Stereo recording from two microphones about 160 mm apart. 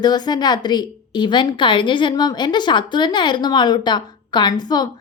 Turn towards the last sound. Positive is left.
turn(degrees=25)  # may be behind; listen again after turning